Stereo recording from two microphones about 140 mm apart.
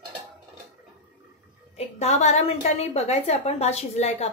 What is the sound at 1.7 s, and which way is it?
A woman's voice, 50° left (ahead or behind).